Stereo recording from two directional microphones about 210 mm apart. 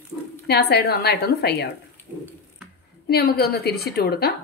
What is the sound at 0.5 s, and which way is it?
A woman's voice, 50° left (ahead or behind).